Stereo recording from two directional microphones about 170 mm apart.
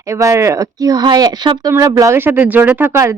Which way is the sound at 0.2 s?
20° right (ahead or behind).